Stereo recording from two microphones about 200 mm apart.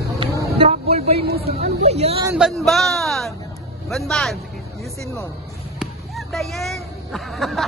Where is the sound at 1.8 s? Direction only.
30° right (ahead or behind).